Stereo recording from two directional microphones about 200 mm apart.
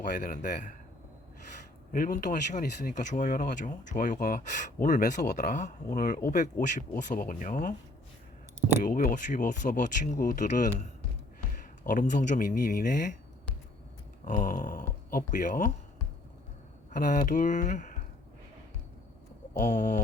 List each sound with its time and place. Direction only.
0.0 s speech: 40° left (ahead or behind)
1.9 s speech: 45° left (ahead or behind)
8.8 s speech: 40° left (ahead or behind)
11.9 s speech: 40° left (ahead or behind)
14.3 s speech: 40° left (ahead or behind)
16.9 s speech: 40° left (ahead or behind)
19.5 s speech: 40° left (ahead or behind)